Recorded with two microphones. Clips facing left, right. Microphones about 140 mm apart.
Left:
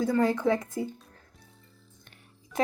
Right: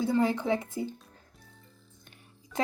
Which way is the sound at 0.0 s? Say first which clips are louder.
Left 2 dB; 25° right (ahead or behind).